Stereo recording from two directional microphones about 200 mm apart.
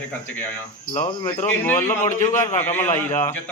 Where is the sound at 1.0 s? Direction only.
15° left (ahead or behind).